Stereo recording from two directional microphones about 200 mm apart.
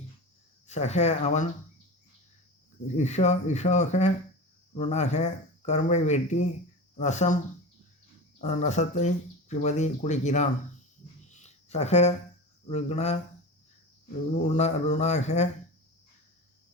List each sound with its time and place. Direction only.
0.7 s speech: 35° left (ahead or behind)
2.8 s speech: 35° left (ahead or behind)
8.4 s speech: 35° left (ahead or behind)
11.3 s a sound: 35° left (ahead or behind)
12.6 s speech: 35° left (ahead or behind)
14.3 s speech: 35° left (ahead or behind)